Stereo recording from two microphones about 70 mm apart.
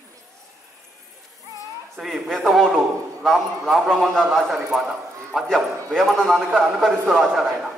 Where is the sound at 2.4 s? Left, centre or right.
Centre.